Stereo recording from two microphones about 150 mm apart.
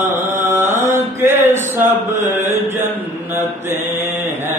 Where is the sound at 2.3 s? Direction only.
15° right (ahead or behind).